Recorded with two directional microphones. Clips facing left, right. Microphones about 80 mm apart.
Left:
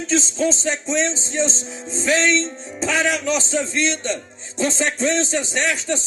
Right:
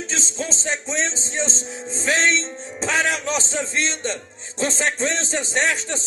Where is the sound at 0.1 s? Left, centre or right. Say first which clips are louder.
Left 13 dB; right.